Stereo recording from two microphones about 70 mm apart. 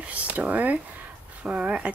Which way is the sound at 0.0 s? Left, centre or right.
Right.